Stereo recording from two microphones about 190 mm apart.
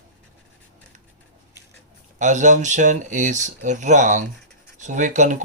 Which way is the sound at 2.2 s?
40° right (ahead or behind).